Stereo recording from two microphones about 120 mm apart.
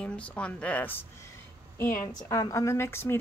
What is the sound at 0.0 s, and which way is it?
A woman's voice, 10° left (ahead or behind).